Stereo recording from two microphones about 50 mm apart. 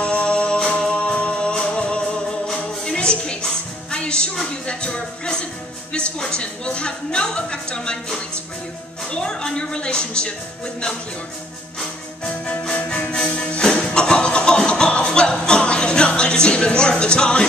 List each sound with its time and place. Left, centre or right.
0.0 s music: left
5.9 s a woman's voice: centre
11.8 s music: centre